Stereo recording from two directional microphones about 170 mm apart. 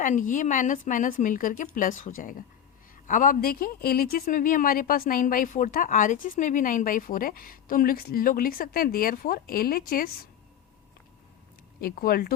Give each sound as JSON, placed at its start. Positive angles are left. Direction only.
{"t": 0.0, "sound": "a woman's voice", "side_deg": 50}
{"t": 11.8, "sound": "speech", "side_deg": 60}